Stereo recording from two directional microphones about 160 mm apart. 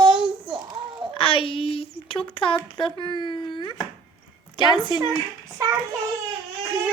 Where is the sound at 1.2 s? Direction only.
35° left (ahead or behind).